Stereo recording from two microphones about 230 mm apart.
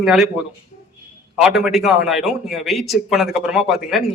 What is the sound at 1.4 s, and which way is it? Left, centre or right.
Speech, centre.